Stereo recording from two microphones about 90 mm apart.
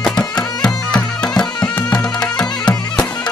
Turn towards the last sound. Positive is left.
turn(degrees=10)  # may be behind; listen again after turning